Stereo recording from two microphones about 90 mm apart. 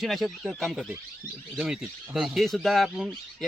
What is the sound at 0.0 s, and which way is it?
Speech, centre (ahead or behind).